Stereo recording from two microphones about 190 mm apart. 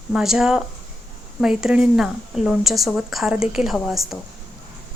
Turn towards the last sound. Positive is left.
turn(degrees=0)  # may be behind; listen again after turning